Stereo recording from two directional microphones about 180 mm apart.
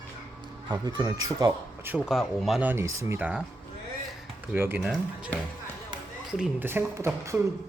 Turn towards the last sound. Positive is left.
turn(degrees=-15)  # may be behind; listen again after turning